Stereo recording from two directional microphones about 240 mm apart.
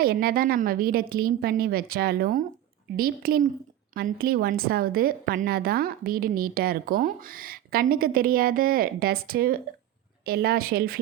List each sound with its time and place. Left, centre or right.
0.0 s a woman's voice: right